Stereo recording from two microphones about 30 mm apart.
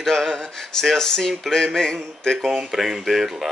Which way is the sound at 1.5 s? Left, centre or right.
Left.